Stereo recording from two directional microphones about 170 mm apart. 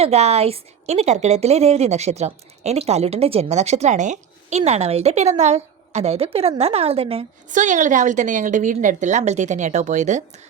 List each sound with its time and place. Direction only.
0.0 s a woman's voice: 40° right (ahead or behind)
7.5 s a woman's voice: 45° right (ahead or behind)